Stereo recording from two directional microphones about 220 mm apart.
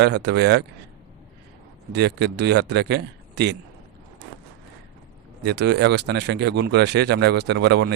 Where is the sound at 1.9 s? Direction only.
50° right (ahead or behind).